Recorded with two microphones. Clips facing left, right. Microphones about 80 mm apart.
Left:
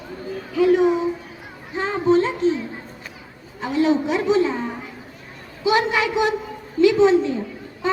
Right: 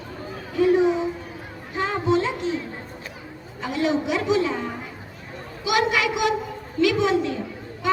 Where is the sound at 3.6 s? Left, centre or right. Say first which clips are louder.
Left 4 dB; left.